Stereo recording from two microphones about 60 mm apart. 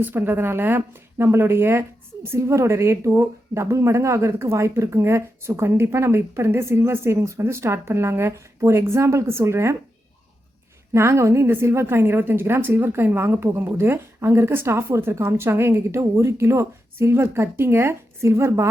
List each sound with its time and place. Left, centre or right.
0.0 s speech: right
10.9 s speech: right